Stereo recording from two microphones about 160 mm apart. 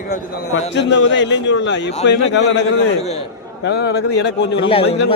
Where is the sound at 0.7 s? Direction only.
90° left.